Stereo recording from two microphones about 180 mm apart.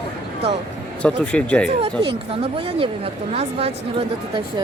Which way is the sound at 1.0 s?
5° left (ahead or behind).